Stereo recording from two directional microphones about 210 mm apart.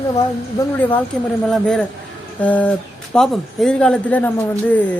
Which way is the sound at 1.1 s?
5° left (ahead or behind).